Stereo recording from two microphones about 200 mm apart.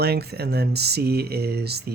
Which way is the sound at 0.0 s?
55° right (ahead or behind).